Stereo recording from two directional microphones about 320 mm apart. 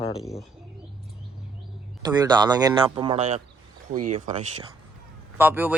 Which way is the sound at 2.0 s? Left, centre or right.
Centre.